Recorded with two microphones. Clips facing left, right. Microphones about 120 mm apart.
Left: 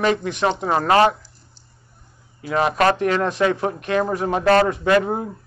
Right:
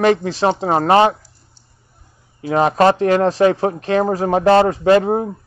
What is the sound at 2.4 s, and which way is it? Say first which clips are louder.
Speech: right 5 dB; 35° right (ahead or behind).